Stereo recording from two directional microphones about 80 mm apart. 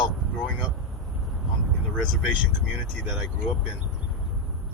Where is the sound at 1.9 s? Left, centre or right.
Centre.